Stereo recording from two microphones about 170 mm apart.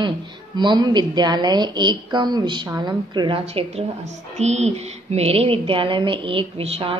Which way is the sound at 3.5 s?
35° right (ahead or behind).